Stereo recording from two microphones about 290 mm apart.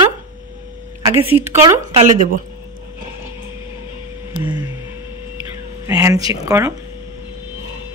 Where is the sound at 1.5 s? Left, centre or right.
Centre.